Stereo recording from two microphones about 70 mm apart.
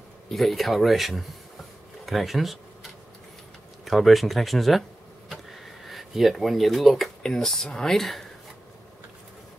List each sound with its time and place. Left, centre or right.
0.3 s speech: centre
3.8 s speech: centre